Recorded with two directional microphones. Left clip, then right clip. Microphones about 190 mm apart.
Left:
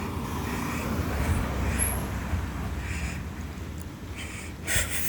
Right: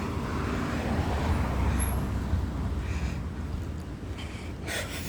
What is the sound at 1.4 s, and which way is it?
Vehicle, 40° left (ahead or behind).